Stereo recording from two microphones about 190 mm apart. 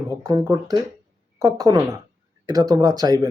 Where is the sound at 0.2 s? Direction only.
20° right (ahead or behind).